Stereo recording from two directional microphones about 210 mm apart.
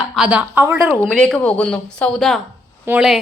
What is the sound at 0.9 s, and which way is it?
A woman's voice, 5° left (ahead or behind).